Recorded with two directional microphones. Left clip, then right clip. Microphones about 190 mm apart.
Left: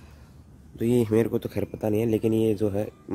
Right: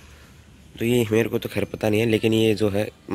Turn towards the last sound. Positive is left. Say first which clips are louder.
# right 4 dB
turn(degrees=-5)  # may be behind; listen again after turning